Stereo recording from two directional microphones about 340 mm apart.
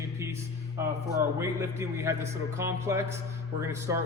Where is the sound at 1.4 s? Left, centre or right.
Centre.